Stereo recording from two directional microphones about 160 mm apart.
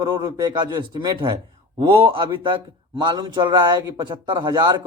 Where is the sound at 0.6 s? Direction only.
25° right (ahead or behind).